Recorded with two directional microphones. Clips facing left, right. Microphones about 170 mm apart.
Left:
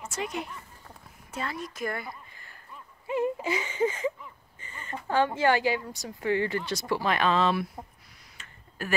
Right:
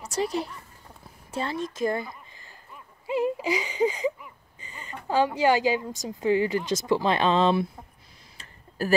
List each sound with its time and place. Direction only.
0.0 s a woman's voice: 35° right (ahead or behind)
3.1 s whimper: 15° right (ahead or behind)
3.4 s speech: 15° right (ahead or behind); by 7.6 s 30° right (ahead or behind)
8.4 s tick-tock: 35° right (ahead or behind)